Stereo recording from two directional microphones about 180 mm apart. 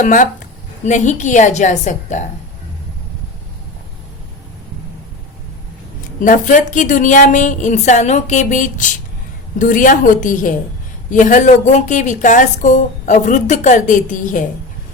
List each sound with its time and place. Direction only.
0.0 s a woman's voice: 45° left (ahead or behind)
6.1 s a woman's voice: 45° left (ahead or behind)